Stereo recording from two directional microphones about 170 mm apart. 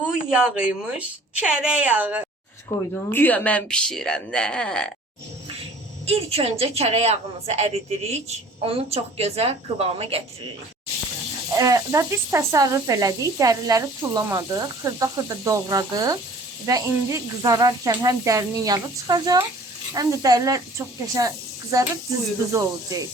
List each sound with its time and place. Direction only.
0.0 s a woman's voice: 5° right (ahead or behind)
3.1 s speech: 10° left (ahead or behind)
6.1 s a woman's voice: 35° right (ahead or behind)
11.5 s speech: 20° right (ahead or behind)